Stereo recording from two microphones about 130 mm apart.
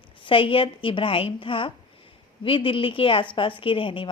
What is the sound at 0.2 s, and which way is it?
A woman's voice, 40° left (ahead or behind).